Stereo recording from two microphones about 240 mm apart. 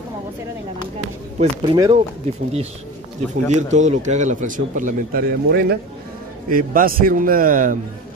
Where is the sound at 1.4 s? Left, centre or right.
Centre.